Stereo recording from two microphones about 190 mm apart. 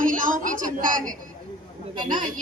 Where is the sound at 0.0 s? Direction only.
45° right (ahead or behind).